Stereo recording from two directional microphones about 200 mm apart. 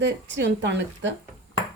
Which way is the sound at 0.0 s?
60° right (ahead or behind).